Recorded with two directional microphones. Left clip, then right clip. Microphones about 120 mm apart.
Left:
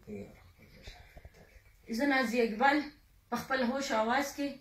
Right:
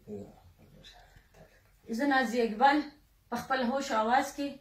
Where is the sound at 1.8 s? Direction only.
25° right (ahead or behind).